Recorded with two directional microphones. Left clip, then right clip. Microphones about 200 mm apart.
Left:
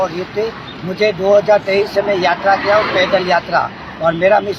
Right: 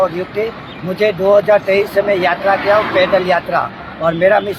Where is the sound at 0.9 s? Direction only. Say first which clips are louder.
Right 1 dB; 10° right (ahead or behind).